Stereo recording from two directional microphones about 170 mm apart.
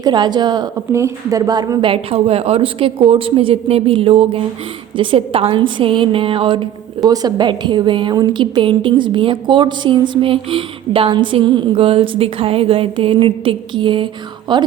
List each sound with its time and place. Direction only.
0.0 s a woman's voice: 25° right (ahead or behind)
1.9 s a woman's voice: 35° right (ahead or behind)